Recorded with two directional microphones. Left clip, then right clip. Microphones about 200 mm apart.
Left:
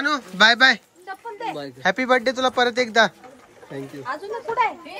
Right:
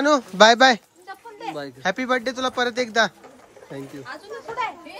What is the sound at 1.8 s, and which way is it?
Speech, 15° right (ahead or behind).